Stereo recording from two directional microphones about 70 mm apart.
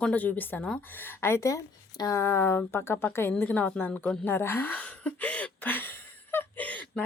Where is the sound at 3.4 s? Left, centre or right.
Left.